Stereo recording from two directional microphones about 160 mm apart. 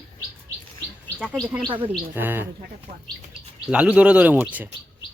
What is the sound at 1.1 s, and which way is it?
Speech, centre (ahead or behind).